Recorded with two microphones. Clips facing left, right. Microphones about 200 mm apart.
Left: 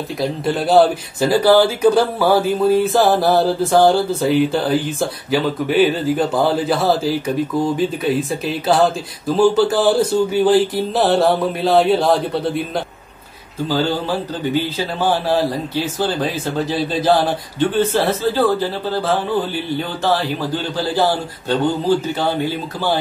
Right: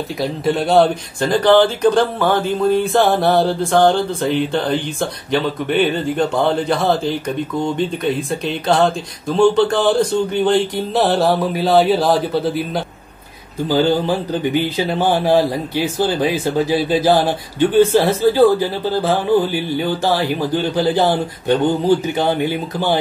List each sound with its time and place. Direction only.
0.2 s speech: centre (ahead or behind)
13.7 s speech: 15° right (ahead or behind)
20.7 s speech: 20° right (ahead or behind)